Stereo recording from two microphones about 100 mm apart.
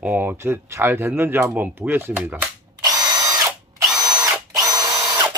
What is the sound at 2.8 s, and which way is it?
Drill, 40° right (ahead or behind).